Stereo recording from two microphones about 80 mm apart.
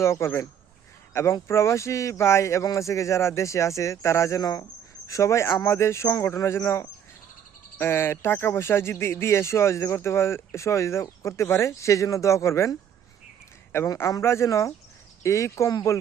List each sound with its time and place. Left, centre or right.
0.0 s speech: left
13.7 s a man's voice: left
14.2 s speech: left